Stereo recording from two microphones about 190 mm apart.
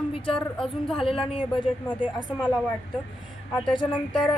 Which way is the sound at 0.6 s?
Centre (ahead or behind).